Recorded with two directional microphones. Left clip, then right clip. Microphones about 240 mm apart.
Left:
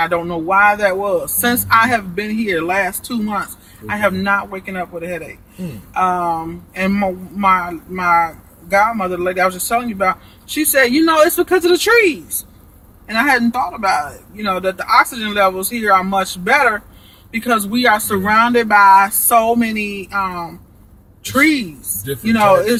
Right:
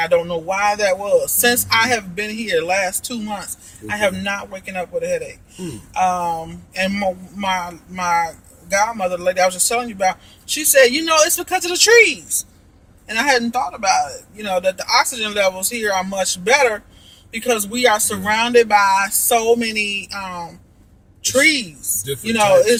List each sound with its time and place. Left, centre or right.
0.0 s speech: right
13.1 s speech: centre